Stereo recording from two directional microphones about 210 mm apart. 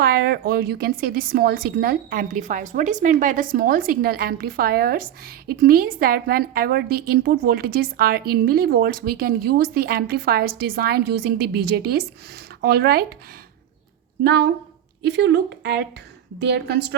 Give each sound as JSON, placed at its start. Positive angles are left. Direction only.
{"t": 0.0, "sound": "a woman's voice", "side_deg": -45}
{"t": 15.0, "sound": "a woman's voice", "side_deg": -55}